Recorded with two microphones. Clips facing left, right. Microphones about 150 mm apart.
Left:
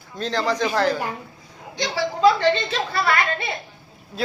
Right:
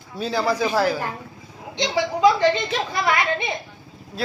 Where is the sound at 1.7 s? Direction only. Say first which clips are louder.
Right 2 dB; 20° right (ahead or behind).